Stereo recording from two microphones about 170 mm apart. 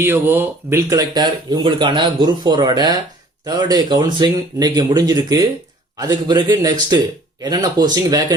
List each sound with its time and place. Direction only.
0.0 s speech: 10° right (ahead or behind)